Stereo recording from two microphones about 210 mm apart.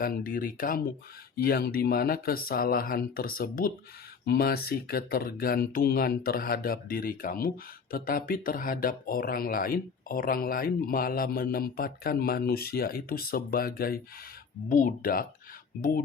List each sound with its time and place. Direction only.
0.0 s speech: 40° left (ahead or behind)